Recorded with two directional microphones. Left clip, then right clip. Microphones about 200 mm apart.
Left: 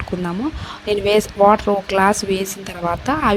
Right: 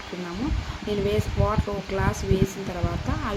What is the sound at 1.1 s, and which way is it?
A woman's voice, 45° left (ahead or behind).